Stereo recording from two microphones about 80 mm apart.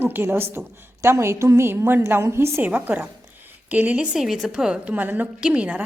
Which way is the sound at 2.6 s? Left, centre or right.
Centre.